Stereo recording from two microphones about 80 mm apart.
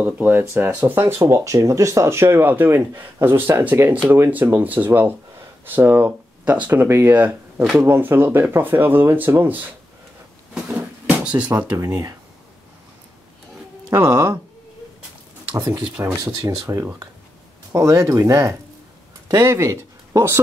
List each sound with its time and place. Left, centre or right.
0.0 s speech: right
1.2 s speech: right
10.5 s drawer open or close: centre
13.8 s speech: right
14.1 s speech: right
16.0 s speech: right
16.4 s speech: right